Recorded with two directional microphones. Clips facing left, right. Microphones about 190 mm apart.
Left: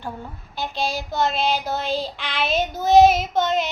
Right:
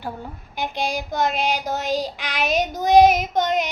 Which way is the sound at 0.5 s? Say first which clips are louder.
Right 1 dB; 15° right (ahead or behind).